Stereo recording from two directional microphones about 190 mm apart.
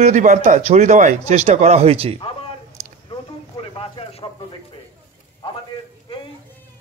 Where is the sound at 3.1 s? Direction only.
30° left (ahead or behind).